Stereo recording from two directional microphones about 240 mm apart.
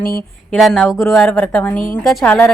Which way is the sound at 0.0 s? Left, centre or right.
Left.